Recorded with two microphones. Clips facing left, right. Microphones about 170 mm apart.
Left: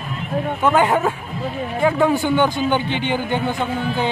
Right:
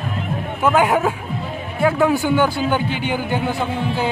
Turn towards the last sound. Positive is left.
turn(degrees=-10)  # may be behind; listen again after turning